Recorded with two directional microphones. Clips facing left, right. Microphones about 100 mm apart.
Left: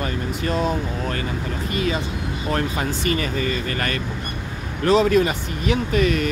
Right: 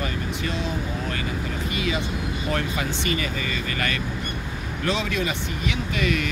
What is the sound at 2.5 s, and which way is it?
Speech, 40° left (ahead or behind).